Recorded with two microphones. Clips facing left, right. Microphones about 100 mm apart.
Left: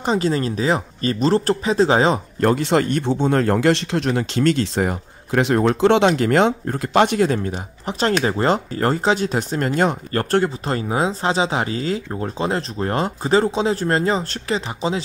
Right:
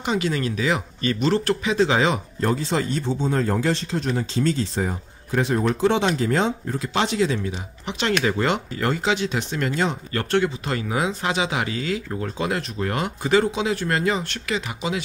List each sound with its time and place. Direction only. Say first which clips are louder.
0.0 s speech: left 4 dB; 35° left (ahead or behind)
2.4 s speech: left 6 dB; 65° left (ahead or behind); by 15.0 s 35° left (ahead or behind)